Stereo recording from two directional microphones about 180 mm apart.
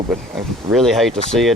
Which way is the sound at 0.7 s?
Centre (ahead or behind).